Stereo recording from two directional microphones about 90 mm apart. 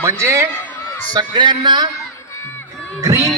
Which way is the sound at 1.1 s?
60° right (ahead or behind).